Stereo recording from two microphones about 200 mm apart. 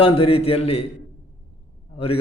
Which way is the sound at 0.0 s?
30° left (ahead or behind).